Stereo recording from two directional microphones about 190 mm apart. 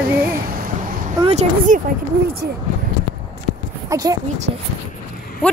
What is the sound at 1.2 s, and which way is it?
Speech, 35° right (ahead or behind).